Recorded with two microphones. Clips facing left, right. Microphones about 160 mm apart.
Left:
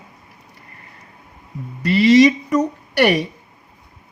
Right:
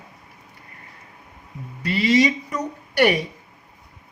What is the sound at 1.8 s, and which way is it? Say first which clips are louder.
Speech: left 7 dB; 80° left.